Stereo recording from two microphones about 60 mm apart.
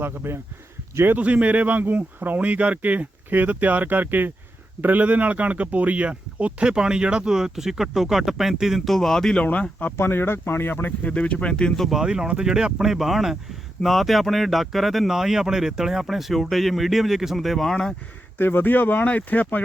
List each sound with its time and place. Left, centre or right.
0.0 s speech: right
1.1 s speech: right; by 9.4 s centre
9.4 s speech: left
10.0 s speech: left
11.1 s speech: centre
11.9 s speech: centre
18.3 s speech: left